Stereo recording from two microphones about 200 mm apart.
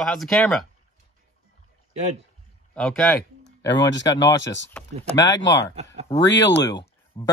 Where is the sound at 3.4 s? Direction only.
65° left (ahead or behind).